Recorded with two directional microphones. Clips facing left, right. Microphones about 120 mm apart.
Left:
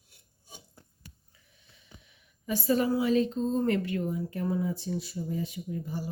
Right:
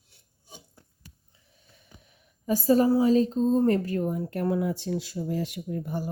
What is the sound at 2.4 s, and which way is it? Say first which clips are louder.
A woman's voice: right 5 dB; 40° right (ahead or behind).